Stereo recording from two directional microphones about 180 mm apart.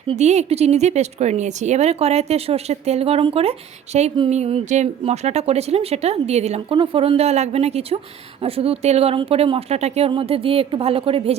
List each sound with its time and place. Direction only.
0.1 s a woman's voice: 40° right (ahead or behind)